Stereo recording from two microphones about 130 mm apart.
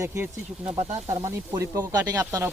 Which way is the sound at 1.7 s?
25° right (ahead or behind).